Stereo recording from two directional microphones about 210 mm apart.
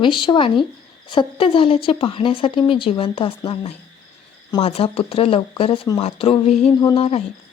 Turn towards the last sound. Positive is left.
turn(degrees=30)  # may be behind; listen again after turning